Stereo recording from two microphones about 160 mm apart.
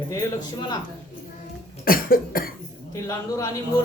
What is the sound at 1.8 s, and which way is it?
Cough, 65° left (ahead or behind).